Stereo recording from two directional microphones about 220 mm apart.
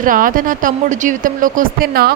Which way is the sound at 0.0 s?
40° right (ahead or behind).